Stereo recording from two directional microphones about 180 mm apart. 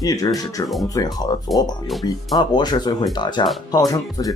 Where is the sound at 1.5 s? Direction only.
Centre (ahead or behind).